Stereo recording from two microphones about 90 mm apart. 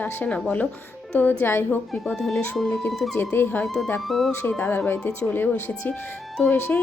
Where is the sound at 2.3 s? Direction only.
20° left (ahead or behind).